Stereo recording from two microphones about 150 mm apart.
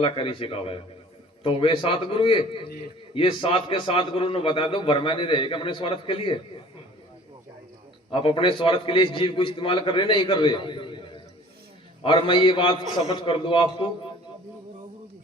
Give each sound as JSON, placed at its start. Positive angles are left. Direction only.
{"t": 0.0, "sound": "a man's voice", "side_deg": 35}
{"t": 8.1, "sound": "a man's voice", "side_deg": 35}